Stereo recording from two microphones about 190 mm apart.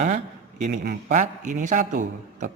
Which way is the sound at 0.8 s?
45° right (ahead or behind).